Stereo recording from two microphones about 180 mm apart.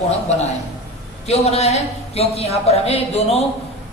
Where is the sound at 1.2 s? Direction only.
35° left (ahead or behind).